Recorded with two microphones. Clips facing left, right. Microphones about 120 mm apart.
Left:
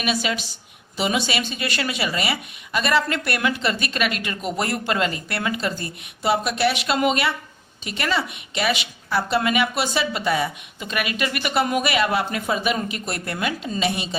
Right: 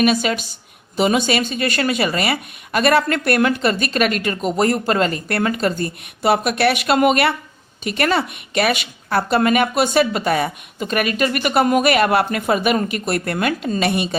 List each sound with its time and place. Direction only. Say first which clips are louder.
0.0 s a woman's voice: right 7 dB; 45° right (ahead or behind)